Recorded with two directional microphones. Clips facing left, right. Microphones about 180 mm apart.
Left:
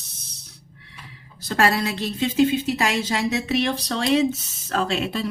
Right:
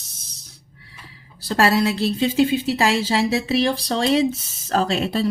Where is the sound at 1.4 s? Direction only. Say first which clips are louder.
Right 3 dB; 35° right (ahead or behind).